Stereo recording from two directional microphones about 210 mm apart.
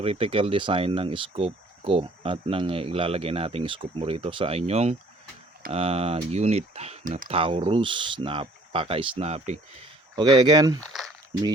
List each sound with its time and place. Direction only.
0.0 s speech: 25° right (ahead or behind)
10.2 s speech: 20° right (ahead or behind)